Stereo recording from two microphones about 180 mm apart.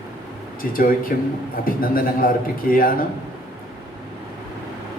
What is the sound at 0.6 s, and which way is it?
A man's voice, 50° left (ahead or behind).